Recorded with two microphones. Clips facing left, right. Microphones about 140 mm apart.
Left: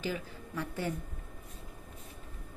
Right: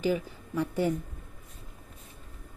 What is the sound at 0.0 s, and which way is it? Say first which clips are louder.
Speech: right 8 dB; 15° right (ahead or behind).